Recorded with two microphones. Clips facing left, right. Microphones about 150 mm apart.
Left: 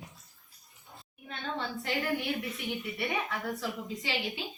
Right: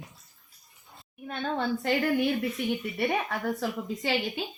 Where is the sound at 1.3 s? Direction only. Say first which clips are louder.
Right 7 dB; 50° right (ahead or behind).